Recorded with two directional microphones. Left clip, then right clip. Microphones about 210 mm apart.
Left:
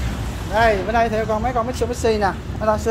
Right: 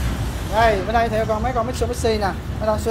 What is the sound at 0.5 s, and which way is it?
Speech, 25° left (ahead or behind).